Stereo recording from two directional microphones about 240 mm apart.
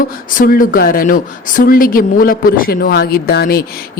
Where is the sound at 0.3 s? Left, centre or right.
Left.